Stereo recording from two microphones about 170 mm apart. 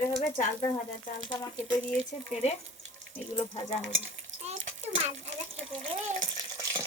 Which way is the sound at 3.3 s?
25° left (ahead or behind).